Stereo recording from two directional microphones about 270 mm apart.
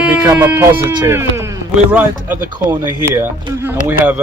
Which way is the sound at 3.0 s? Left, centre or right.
Centre.